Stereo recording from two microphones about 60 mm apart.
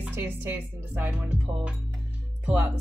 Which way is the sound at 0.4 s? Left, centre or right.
Right.